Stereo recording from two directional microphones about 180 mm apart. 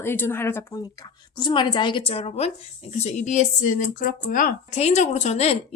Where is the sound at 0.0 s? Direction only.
10° left (ahead or behind).